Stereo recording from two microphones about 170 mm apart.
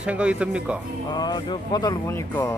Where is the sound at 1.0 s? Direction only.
25° left (ahead or behind).